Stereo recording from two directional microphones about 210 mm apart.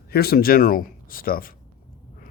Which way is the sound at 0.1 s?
45° left (ahead or behind).